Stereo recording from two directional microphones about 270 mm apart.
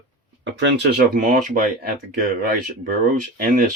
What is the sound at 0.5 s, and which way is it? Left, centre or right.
Speech, right.